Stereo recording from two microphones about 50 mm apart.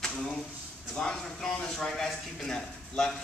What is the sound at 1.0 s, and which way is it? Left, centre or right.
A man's voice, centre.